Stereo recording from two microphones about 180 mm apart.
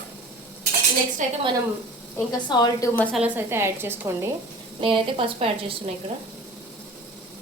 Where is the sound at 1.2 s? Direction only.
45° right (ahead or behind).